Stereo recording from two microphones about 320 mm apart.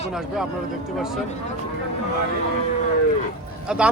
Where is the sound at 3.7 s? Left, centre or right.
Centre.